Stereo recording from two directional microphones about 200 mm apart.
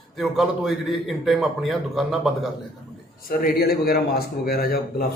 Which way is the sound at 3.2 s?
50° left (ahead or behind).